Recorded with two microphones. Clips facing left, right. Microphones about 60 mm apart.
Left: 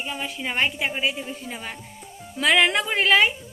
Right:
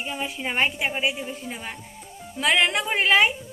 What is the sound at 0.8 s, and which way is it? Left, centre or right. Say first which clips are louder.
A woman's voice: even; centre.